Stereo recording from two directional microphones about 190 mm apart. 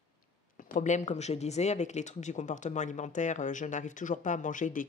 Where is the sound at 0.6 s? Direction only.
40° left (ahead or behind).